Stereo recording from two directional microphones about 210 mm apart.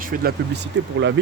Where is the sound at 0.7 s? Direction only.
60° right (ahead or behind).